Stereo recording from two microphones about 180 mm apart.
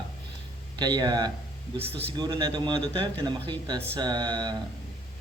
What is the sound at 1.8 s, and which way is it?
Speech, 35° right (ahead or behind).